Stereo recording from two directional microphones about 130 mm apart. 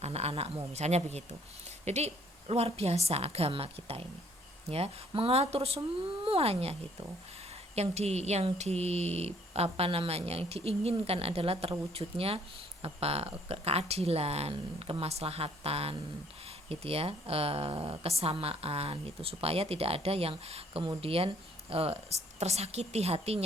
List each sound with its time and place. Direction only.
0.0 s a woman's voice: 55° right (ahead or behind)